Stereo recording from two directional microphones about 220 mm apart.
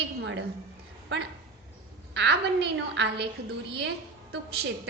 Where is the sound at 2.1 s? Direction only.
50° right (ahead or behind).